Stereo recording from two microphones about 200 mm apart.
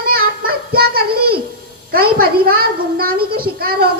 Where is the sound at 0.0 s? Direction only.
50° right (ahead or behind).